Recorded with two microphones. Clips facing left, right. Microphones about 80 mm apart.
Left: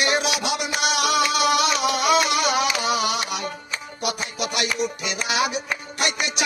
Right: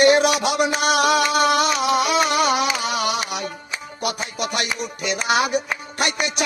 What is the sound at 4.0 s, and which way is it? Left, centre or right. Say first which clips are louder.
Music: right 2 dB; right.